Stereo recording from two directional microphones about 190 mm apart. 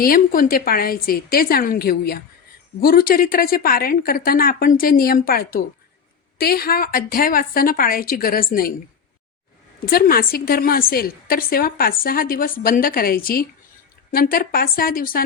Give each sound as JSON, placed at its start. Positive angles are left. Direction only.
{"t": 0.0, "sound": "a woman's voice", "side_deg": 50}
{"t": 9.8, "sound": "a woman's voice", "side_deg": 50}